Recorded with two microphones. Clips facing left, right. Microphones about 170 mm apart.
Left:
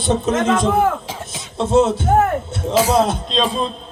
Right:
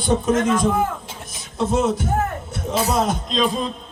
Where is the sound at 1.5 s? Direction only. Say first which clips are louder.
Left 5 dB; 25° left (ahead or behind).